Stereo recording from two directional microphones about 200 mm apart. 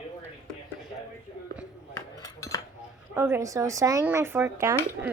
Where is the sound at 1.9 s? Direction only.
15° left (ahead or behind).